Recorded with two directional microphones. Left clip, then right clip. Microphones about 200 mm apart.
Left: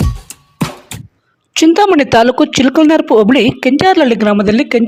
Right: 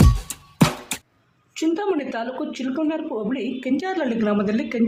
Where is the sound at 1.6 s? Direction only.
50° left (ahead or behind).